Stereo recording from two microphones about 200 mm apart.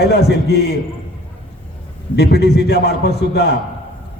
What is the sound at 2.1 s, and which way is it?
A man's voice, 55° left (ahead or behind).